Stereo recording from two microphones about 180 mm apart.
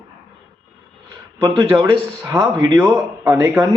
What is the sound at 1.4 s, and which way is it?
Speech, 20° right (ahead or behind).